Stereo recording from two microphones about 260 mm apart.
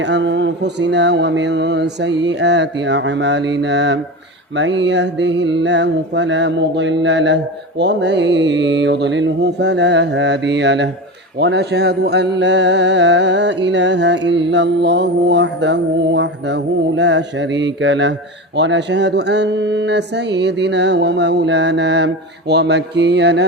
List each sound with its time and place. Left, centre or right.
0.0 s mantra: right
18.5 s speech: right